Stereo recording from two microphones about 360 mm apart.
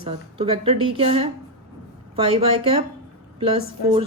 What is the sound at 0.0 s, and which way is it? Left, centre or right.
A woman's voice, centre.